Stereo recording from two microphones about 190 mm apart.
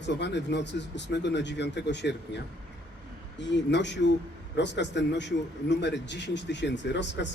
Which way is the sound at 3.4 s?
70° left (ahead or behind).